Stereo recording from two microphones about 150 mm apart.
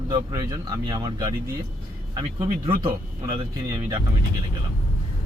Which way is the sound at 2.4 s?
25° right (ahead or behind).